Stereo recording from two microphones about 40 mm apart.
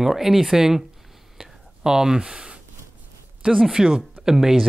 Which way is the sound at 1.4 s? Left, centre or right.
Centre.